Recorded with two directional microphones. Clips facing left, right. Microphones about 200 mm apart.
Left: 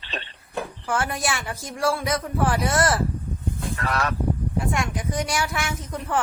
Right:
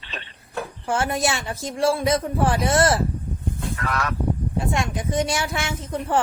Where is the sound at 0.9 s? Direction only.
25° right (ahead or behind).